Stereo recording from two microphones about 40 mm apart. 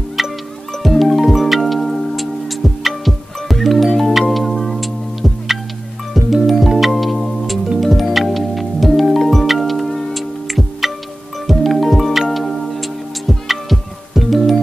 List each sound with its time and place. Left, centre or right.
0.2 s music: centre